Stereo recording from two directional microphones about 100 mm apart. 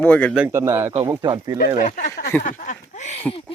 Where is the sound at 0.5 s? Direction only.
25° right (ahead or behind).